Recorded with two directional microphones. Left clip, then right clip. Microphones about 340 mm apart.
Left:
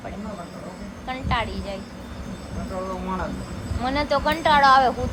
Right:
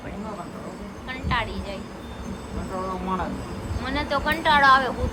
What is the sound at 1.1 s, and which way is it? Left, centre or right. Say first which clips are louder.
Speech: left 1 dB; centre.